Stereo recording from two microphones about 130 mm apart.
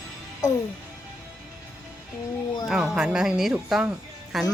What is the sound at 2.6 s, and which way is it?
Speech, 5° right (ahead or behind).